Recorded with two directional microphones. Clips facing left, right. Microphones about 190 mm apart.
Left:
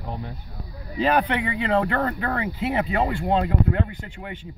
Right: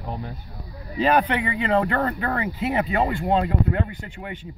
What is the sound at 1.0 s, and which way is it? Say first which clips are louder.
Speech: right 1 dB; 15° right (ahead or behind).